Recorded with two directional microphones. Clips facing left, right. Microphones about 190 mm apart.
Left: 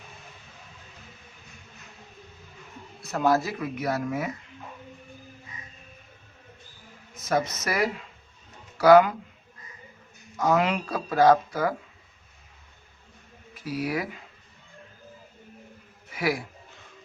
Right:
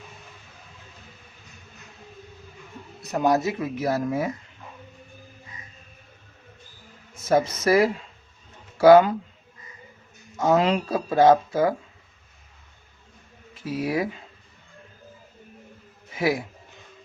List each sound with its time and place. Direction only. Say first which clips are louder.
3.0 s speech: right 2 dB; 20° right (ahead or behind)
7.2 s speech: right 5 dB; 30° right (ahead or behind)
10.3 s speech: right 3 dB; 25° right (ahead or behind)
13.5 s speech: right 3 dB; 25° right (ahead or behind)
16.1 s a man's voice: right 3 dB; 25° right (ahead or behind)